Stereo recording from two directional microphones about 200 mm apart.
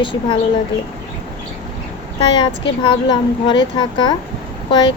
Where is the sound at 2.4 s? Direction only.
25° left (ahead or behind).